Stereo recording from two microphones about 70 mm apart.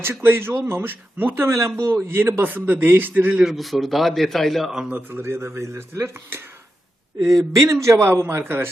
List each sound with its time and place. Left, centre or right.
0.0 s speech: right
3.4 s a man's voice: centre
4.9 s speech: right
5.2 s speech: right
7.5 s speech: right